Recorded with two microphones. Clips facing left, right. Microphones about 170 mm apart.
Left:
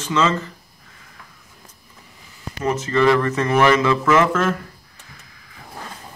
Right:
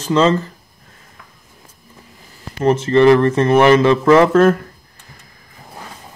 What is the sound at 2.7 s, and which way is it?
Speech, 30° right (ahead or behind).